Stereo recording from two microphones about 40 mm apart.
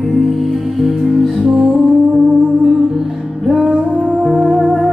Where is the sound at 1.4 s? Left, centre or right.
Right.